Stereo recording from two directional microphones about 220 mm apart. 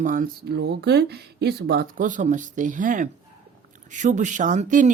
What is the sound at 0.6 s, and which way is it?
Speech, 50° right (ahead or behind).